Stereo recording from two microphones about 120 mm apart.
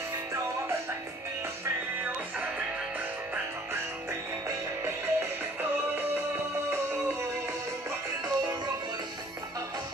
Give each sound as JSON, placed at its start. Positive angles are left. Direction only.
{"t": 4.5, "sound": "music", "side_deg": -20}